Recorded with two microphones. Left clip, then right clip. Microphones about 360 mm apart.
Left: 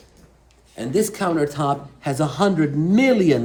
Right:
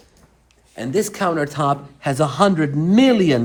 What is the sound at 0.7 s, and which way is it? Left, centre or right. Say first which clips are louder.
A man's voice: even; right.